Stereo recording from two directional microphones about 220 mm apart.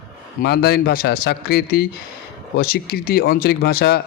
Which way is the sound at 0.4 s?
45° left (ahead or behind).